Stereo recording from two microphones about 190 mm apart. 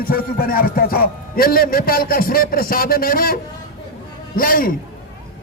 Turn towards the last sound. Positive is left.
turn(degrees=50)  # may be behind; listen again after turning